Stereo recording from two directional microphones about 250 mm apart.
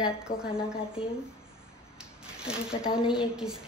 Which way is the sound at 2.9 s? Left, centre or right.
Centre.